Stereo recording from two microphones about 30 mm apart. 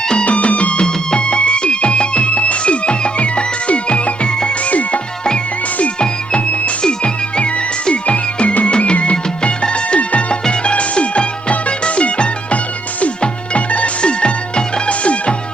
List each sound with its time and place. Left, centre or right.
0.3 s music: left
4.6 s music: left
6.8 s music: left
13.7 s music: left
14.0 s music: left